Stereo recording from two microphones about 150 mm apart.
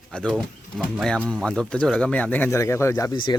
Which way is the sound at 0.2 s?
5° left (ahead or behind).